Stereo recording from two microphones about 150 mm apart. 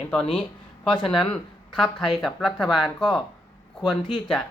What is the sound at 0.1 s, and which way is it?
Speech, 5° left (ahead or behind).